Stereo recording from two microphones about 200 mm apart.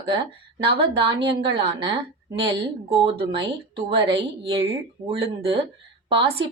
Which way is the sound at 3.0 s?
25° right (ahead or behind).